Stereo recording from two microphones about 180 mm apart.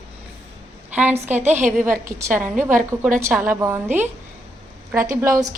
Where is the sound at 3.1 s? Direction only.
10° right (ahead or behind).